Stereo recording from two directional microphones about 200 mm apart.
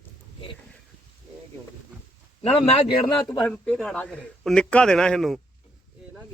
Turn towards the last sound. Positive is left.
turn(degrees=0)  # may be behind; listen again after turning